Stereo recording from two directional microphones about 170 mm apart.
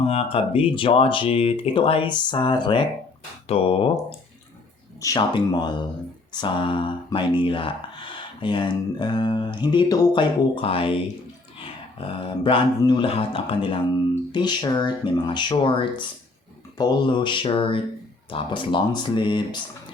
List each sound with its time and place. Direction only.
0.0 s speech: 35° left (ahead or behind)
4.9 s speech: 20° left (ahead or behind)